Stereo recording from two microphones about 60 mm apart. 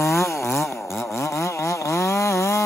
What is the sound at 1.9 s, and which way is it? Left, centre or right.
Chainsaw, left.